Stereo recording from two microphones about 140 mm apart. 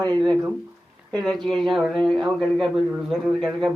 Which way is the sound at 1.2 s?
5° left (ahead or behind).